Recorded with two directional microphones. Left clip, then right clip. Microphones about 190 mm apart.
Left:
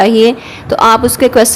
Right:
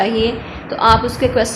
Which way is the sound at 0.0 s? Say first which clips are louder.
Left 9 dB; 50° left (ahead or behind).